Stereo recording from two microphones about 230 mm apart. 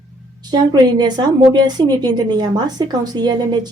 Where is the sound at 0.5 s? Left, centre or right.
Centre.